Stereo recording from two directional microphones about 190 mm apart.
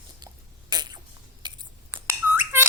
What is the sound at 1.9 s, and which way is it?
Squawk, 10° right (ahead or behind).